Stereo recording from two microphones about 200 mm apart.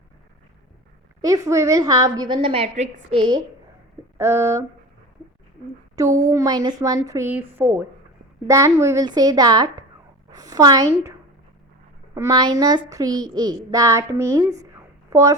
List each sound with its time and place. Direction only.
1.2 s a woman's voice: 15° right (ahead or behind)
4.2 s a child's voice: 15° right (ahead or behind)
6.0 s a child's voice: 15° right (ahead or behind)
12.1 s a child's voice: 20° right (ahead or behind)